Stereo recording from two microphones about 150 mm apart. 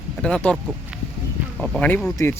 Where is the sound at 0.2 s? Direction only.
5° left (ahead or behind).